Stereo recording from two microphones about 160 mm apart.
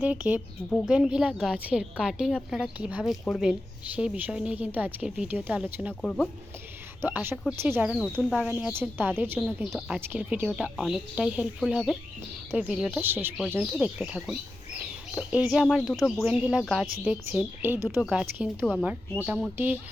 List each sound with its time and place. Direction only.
0.0 s a woman's voice: 10° right (ahead or behind)
3.0 s a woman's voice: 5° left (ahead or behind)
5.9 s speech: 5° left (ahead or behind)
7.0 s a woman's voice: 15° right (ahead or behind)
9.6 s speech: centre (ahead or behind)
10.1 s a woman's voice: 10° right (ahead or behind)